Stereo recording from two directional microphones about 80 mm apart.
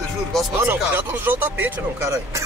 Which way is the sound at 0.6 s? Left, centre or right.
Right.